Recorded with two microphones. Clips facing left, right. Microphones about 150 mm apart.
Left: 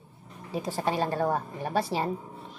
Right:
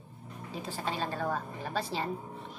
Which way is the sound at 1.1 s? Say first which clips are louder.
Left 6 dB; 55° left (ahead or behind).